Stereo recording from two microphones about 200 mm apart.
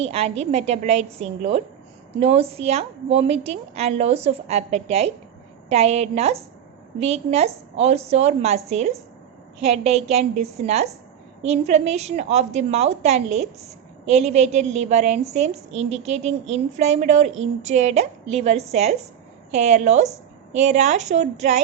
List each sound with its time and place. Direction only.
0.1 s a woman's voice: 30° right (ahead or behind)